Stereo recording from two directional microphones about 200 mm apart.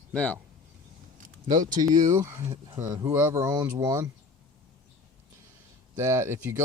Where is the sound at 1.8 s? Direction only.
20° right (ahead or behind).